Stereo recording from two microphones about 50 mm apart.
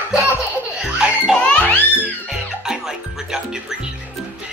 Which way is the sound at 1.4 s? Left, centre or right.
Left.